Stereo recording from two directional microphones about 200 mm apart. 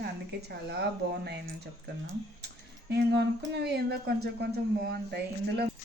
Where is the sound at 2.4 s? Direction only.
55° right (ahead or behind).